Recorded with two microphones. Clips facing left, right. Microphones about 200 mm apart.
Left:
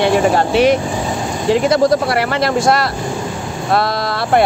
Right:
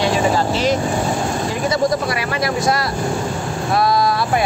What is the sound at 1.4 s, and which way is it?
Speech, 75° left (ahead or behind).